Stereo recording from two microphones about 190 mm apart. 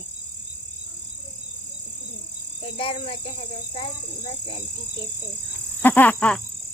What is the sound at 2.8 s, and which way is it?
Speech, 30° left (ahead or behind).